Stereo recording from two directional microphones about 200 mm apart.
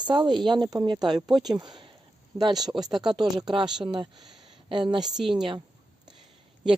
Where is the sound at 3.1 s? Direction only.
20° right (ahead or behind).